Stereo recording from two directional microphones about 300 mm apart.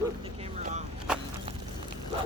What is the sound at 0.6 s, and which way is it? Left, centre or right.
Vehicle, right.